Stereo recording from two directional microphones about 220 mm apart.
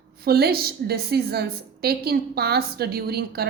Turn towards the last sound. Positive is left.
turn(degrees=-45)  # may be behind; listen again after turning